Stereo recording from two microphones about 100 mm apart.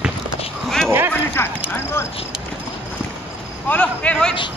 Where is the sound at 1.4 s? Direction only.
25° left (ahead or behind).